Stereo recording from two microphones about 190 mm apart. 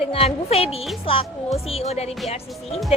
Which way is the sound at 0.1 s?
30° left (ahead or behind).